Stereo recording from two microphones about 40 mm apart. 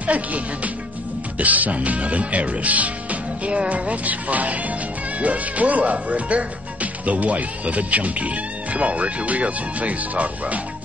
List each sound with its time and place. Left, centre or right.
0.0 s speech: right
1.4 s speech: right